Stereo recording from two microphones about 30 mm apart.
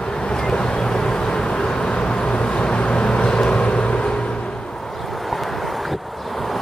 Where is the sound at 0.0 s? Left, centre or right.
Left.